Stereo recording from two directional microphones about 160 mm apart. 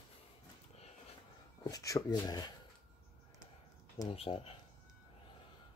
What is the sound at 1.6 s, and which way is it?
Speech, 20° left (ahead or behind).